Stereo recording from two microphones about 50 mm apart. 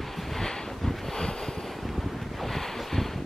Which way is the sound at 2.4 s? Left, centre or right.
Centre.